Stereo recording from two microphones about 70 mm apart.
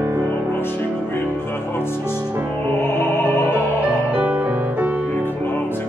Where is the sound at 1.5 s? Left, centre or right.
Left.